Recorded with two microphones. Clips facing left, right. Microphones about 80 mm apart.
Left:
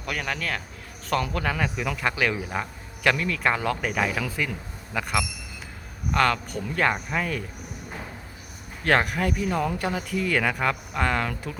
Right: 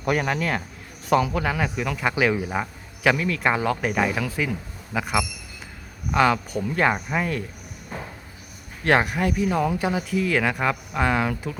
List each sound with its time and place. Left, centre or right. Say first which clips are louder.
0.0 s speech: right 7 dB; right; by 7.4 s centre
8.8 s speech: right 2 dB; centre